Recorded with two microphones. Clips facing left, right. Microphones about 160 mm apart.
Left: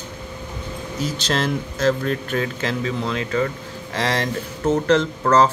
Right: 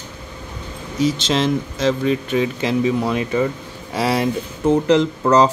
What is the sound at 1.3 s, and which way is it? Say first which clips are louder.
Speech: right 4 dB; centre (ahead or behind).